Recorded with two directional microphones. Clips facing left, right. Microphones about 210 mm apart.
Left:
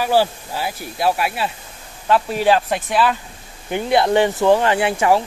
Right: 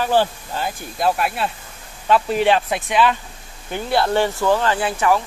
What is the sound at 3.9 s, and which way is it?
Speech, 15° left (ahead or behind).